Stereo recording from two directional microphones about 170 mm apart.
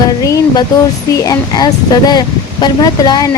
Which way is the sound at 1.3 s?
25° left (ahead or behind).